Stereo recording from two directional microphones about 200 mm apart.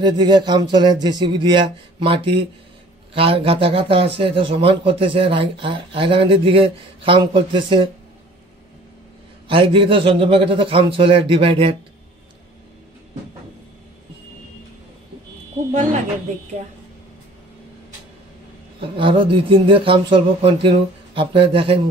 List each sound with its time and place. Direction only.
0.0 s a man's voice: 20° right (ahead or behind)
9.5 s a man's voice: 25° right (ahead or behind)
18.8 s a man's voice: 25° right (ahead or behind)